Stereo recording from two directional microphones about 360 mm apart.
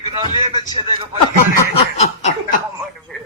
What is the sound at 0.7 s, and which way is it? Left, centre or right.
Speech, centre.